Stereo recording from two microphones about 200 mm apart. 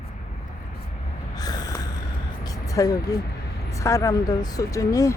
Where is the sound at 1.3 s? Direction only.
20° left (ahead or behind).